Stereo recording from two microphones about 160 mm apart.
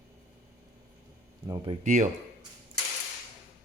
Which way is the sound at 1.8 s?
50° right (ahead or behind).